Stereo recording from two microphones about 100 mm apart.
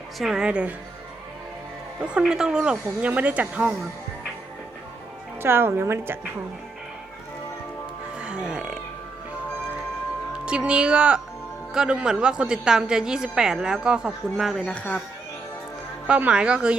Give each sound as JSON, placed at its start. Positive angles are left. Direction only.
{"t": 0.2, "sound": "a woman's voice", "side_deg": -5}
{"t": 2.0, "sound": "a woman's voice", "side_deg": -10}
{"t": 5.4, "sound": "a woman's voice", "side_deg": -25}
{"t": 8.2, "sound": "music", "side_deg": -10}
{"t": 10.3, "sound": "a woman's voice", "side_deg": -10}
{"t": 16.0, "sound": "a woman's voice", "side_deg": -10}